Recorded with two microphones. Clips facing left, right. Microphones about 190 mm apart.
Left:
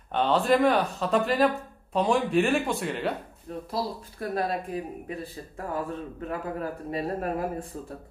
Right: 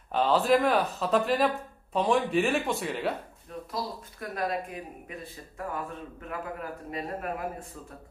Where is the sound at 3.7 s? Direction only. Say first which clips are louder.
Left 4 dB; 30° left (ahead or behind).